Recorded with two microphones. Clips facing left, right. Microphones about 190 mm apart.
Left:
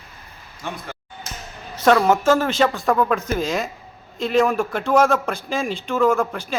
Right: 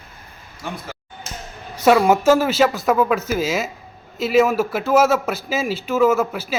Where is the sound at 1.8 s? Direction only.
10° right (ahead or behind).